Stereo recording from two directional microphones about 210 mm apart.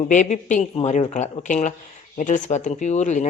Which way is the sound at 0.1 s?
35° left (ahead or behind).